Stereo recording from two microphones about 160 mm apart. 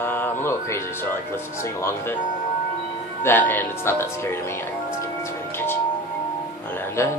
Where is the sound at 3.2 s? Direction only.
15° left (ahead or behind).